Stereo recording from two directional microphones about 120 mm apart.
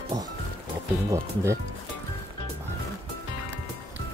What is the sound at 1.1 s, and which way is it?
Speech, 25° right (ahead or behind).